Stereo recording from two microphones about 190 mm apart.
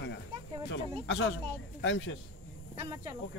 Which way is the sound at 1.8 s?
85° left.